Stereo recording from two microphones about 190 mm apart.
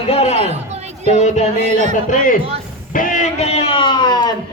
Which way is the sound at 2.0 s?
45° left (ahead or behind).